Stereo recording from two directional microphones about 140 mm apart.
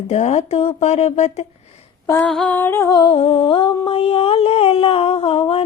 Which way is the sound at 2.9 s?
35° left (ahead or behind).